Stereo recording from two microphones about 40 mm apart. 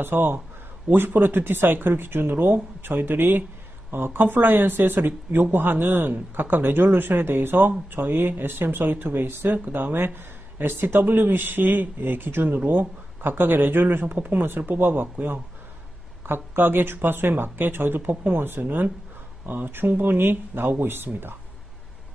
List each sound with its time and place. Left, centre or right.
0.0 s speech: right
16.3 s speech: right